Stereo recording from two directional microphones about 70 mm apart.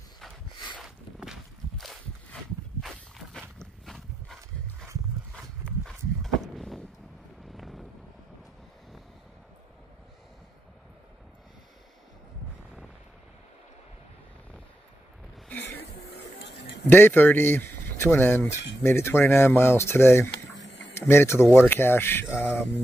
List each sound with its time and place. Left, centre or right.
0.8 s walk: centre
5.9 s walk: centre
7.5 s wind noise: centre
16.9 s speech: left